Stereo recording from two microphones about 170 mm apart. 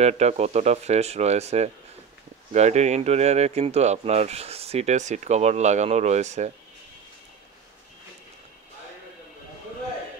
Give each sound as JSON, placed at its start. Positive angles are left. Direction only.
{"t": 0.0, "sound": "speech", "side_deg": -40}